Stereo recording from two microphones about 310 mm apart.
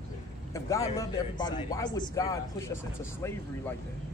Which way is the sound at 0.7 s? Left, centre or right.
Centre.